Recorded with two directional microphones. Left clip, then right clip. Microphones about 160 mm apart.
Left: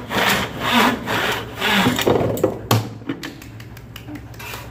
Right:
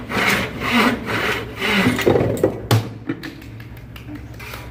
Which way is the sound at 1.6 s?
5° right (ahead or behind).